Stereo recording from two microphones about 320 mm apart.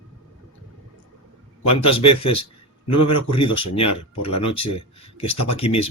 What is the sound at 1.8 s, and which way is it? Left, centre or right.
A man's voice, centre.